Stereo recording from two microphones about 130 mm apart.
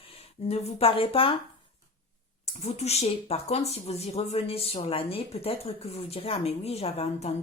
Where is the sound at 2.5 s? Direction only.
55° left (ahead or behind).